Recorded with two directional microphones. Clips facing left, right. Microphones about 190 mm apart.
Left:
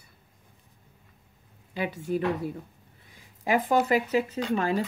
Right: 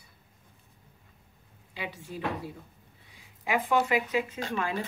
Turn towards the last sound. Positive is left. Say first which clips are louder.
# left 6 dB
turn(degrees=40)  # may be behind; listen again after turning